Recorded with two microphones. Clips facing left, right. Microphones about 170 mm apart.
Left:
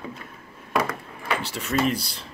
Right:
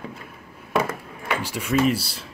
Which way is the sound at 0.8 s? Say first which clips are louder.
Right 1 dB; 25° right (ahead or behind).